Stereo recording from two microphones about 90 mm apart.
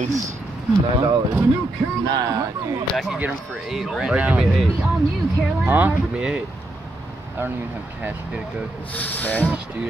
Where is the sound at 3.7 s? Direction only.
5° right (ahead or behind).